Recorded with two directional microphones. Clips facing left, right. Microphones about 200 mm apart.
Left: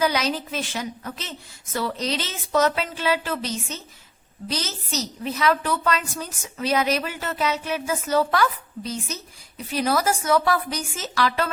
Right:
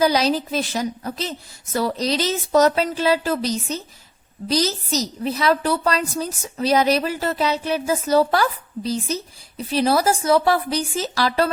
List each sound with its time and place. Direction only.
0.0 s a woman's voice: 35° right (ahead or behind)